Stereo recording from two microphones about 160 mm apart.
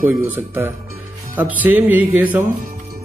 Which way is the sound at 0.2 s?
15° right (ahead or behind).